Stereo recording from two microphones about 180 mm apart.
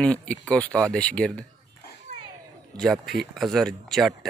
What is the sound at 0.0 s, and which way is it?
Speech, 5° left (ahead or behind).